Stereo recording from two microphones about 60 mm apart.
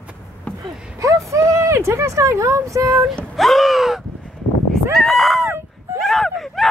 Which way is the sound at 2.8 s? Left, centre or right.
Right.